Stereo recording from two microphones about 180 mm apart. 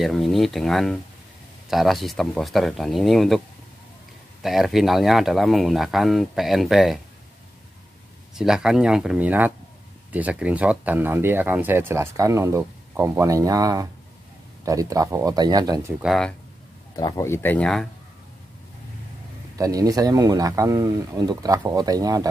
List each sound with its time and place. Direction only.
0.0 s speech: centre (ahead or behind)
8.4 s speech: 5° right (ahead or behind); by 15.9 s 20° right (ahead or behind)
16.0 s speech: centre (ahead or behind)
16.9 s speech: 20° left (ahead or behind)
19.5 s speech: 20° right (ahead or behind)